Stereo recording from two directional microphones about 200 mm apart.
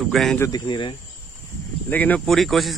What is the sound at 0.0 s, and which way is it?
Speech, centre (ahead or behind).